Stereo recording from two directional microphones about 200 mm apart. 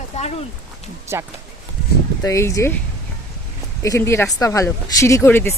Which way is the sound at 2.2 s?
15° left (ahead or behind).